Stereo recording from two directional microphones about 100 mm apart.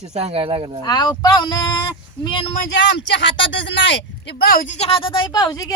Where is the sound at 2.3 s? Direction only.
70° left (ahead or behind).